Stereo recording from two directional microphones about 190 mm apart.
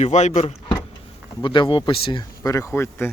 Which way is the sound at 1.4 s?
25° left (ahead or behind).